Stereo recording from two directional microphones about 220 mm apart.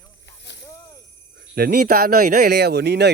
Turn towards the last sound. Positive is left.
turn(degrees=-50)  # may be behind; listen again after turning